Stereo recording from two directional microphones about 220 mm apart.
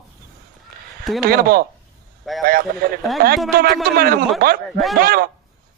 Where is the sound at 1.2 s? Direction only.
45° right (ahead or behind).